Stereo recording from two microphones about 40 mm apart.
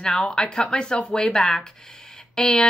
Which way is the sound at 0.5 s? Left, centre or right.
Left.